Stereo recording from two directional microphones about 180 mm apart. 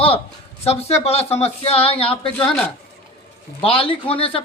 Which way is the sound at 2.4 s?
5° left (ahead or behind).